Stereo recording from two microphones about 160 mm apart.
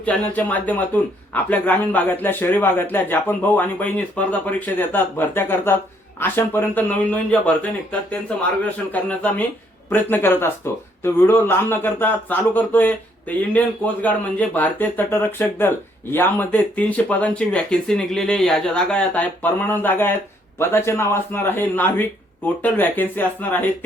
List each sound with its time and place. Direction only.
0.0 s speech: 10° left (ahead or behind)
8.9 s speech: 10° left (ahead or behind)